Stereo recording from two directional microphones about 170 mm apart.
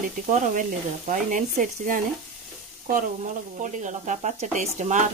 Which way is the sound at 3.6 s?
45° right (ahead or behind).